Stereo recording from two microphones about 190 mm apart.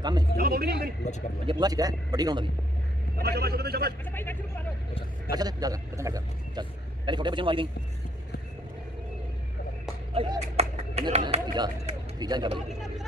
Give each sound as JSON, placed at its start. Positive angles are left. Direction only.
{"t": 0.4, "sound": "speech", "side_deg": -55}
{"t": 1.4, "sound": "a man's voice", "side_deg": -25}
{"t": 3.2, "sound": "a man's voice", "side_deg": -55}
{"t": 4.0, "sound": "speech", "side_deg": 10}
{"t": 5.3, "sound": "a man's voice", "side_deg": -20}
{"t": 10.1, "sound": "speech", "side_deg": -30}